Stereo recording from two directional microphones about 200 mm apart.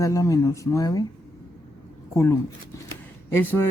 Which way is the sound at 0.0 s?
15° left (ahead or behind).